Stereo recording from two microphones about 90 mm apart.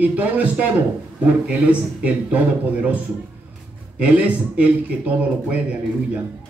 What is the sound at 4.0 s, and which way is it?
A man's voice, 15° right (ahead or behind).